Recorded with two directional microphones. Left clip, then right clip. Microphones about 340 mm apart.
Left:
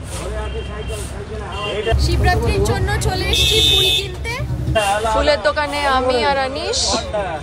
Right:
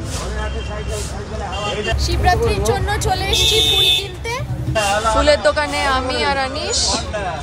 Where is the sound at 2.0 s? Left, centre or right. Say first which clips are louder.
Right 2 dB; centre.